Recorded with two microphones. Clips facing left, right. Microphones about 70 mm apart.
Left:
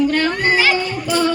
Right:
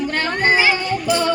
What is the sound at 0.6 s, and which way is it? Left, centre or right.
Children playing, right.